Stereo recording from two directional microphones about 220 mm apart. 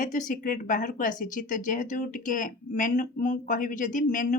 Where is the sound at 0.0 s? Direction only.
35° left (ahead or behind).